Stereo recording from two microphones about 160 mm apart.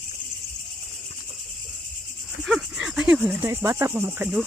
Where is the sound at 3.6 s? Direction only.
15° right (ahead or behind).